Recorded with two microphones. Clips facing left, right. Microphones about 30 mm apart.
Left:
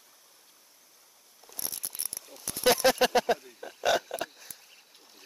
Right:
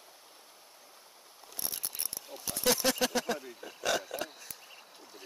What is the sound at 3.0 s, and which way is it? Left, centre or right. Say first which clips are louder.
Speech: left 7 dB; left.